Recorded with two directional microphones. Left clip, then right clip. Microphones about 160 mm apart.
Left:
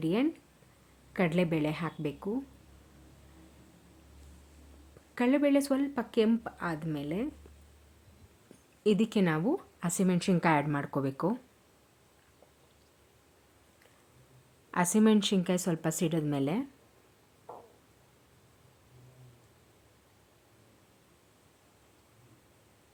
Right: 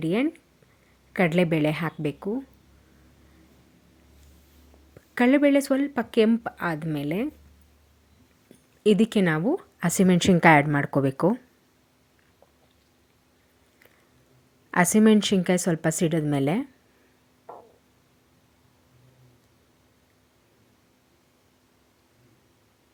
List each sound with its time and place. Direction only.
0.0 s speech: 25° right (ahead or behind)
5.1 s speech: 35° right (ahead or behind)
8.8 s speech: 30° right (ahead or behind)
14.7 s speech: 30° right (ahead or behind)
17.5 s a sound: 30° right (ahead or behind)